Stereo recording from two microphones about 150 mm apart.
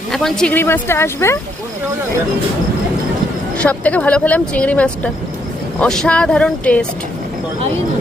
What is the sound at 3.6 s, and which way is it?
Speech, 10° left (ahead or behind).